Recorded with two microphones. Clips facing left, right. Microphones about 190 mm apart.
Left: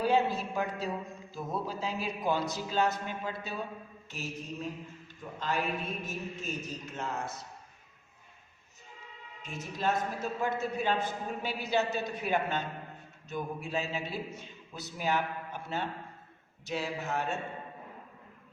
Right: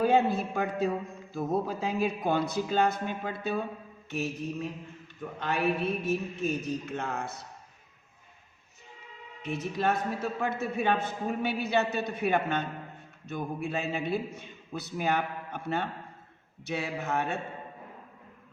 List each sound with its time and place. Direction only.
0.0 s a man's voice: 55° right (ahead or behind)
9.4 s a man's voice: 65° right (ahead or behind)